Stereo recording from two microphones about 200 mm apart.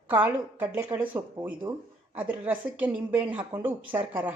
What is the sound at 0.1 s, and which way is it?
A woman's voice, 10° right (ahead or behind).